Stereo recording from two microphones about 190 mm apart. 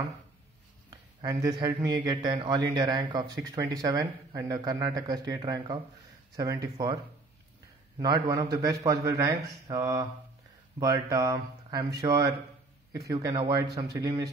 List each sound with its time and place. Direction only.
0.8 s a sound: 20° right (ahead or behind)
1.9 s speech: 25° right (ahead or behind)
8.0 s a man's voice: 20° right (ahead or behind)